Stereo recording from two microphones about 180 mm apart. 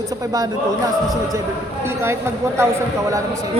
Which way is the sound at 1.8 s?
15° right (ahead or behind).